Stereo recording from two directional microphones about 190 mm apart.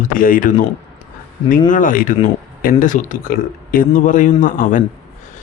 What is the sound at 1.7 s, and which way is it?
A man's voice, 45° left (ahead or behind).